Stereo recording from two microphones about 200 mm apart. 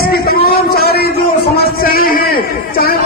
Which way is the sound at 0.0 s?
50° left (ahead or behind).